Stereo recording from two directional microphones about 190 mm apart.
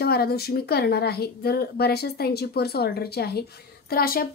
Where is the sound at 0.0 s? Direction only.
55° left (ahead or behind).